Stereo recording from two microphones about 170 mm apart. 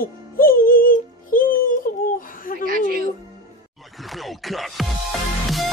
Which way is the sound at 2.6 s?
55° right (ahead or behind).